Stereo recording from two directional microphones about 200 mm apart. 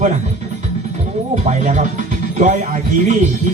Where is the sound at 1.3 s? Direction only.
35° right (ahead or behind).